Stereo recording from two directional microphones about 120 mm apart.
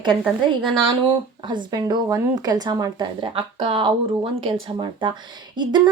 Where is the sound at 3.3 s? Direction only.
45° right (ahead or behind).